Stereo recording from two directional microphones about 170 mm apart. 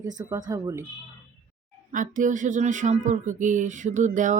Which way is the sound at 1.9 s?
50° right (ahead or behind).